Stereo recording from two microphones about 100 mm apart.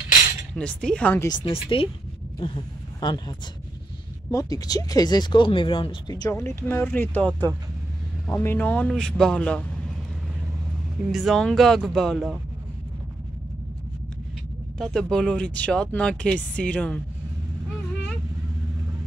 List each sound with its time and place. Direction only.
0.6 s speech: 10° left (ahead or behind)
1.3 s speech: 60° left (ahead or behind)
4.3 s speech: 35° left (ahead or behind); by 5.9 s 60° left (ahead or behind)
6.0 s speech: 40° left (ahead or behind)
6.4 s speech: 25° left (ahead or behind)
8.4 s speech: 20° left (ahead or behind)
11.1 s speech: centre (ahead or behind)
14.8 s speech: 5° left (ahead or behind)